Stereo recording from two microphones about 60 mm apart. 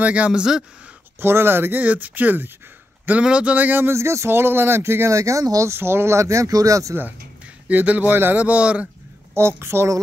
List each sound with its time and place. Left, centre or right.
0.0 s speech: right
1.2 s speech: right
3.1 s a man's voice: centre
3.5 s speech: right
3.9 s speech: right
5.7 s speech: right
7.6 s a man's voice: right
9.3 s speech: right